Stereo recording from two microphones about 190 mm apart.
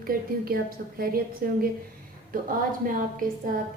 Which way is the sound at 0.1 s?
50° right (ahead or behind).